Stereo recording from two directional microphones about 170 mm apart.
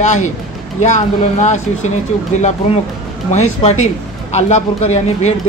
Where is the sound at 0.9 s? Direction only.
45° left (ahead or behind).